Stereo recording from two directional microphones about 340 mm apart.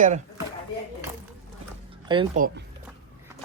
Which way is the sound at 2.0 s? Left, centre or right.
Centre.